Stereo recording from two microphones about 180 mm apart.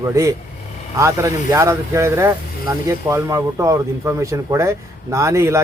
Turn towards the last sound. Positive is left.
turn(degrees=-15)  # may be behind; listen again after turning